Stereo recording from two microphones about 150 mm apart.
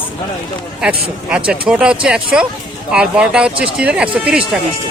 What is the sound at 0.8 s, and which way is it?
Speech, 5° right (ahead or behind).